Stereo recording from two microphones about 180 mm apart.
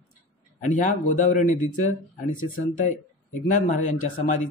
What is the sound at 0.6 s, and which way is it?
A man's voice, 45° left (ahead or behind).